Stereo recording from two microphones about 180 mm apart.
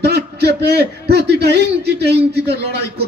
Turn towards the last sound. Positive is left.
turn(degrees=-65)  # may be behind; listen again after turning